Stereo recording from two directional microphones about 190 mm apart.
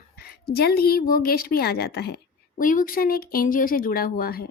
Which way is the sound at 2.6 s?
45° left (ahead or behind).